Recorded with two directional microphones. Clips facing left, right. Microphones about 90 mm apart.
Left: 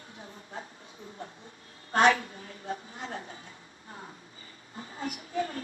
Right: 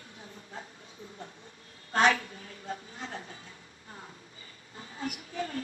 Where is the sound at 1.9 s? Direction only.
35° left (ahead or behind).